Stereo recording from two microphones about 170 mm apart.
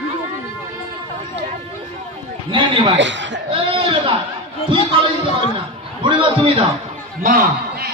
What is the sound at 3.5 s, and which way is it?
Speech, 30° right (ahead or behind).